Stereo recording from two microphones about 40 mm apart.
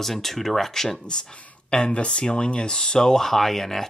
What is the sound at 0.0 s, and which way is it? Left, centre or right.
Speech, centre.